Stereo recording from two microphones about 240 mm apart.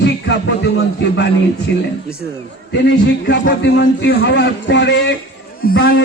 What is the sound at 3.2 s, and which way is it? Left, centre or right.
A man's voice, left.